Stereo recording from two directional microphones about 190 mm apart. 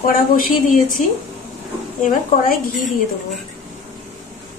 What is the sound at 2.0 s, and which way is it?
Speech, 45° left (ahead or behind).